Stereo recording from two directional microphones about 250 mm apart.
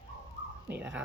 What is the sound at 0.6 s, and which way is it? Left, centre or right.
Speech, centre.